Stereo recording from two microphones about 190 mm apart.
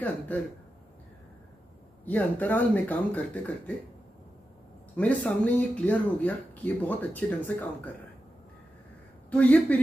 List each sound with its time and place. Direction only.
2.0 s speech: 10° left (ahead or behind)
4.9 s speech: 5° left (ahead or behind)
9.3 s speech: 5° left (ahead or behind)